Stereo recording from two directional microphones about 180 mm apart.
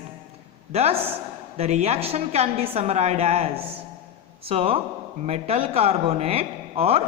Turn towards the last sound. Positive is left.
turn(degrees=-35)  # may be behind; listen again after turning